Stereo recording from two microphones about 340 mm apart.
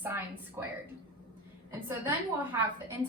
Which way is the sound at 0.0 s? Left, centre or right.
Centre.